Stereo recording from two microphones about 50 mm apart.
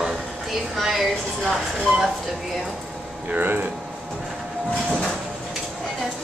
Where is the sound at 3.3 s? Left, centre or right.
Right.